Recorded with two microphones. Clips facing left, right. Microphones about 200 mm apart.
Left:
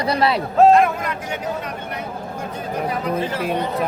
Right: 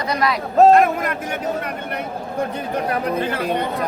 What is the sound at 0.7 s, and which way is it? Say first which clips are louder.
Speech: right 1 dB; 55° right (ahead or behind).